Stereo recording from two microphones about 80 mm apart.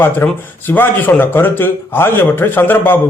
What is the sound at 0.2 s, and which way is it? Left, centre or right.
A man's voice, left.